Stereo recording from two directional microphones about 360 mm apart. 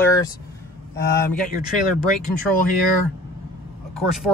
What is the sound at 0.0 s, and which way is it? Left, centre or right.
Vehicle, centre.